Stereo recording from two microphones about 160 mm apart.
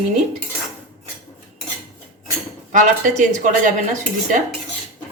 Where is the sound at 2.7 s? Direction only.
55° right (ahead or behind).